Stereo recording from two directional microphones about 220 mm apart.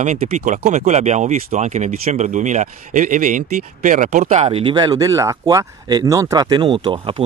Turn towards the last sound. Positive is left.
turn(degrees=-20)  # may be behind; listen again after turning